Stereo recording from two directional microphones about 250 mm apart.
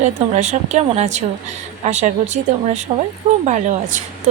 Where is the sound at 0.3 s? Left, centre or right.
Right.